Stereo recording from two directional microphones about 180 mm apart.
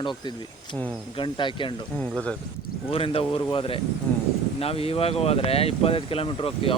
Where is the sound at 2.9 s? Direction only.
30° left (ahead or behind).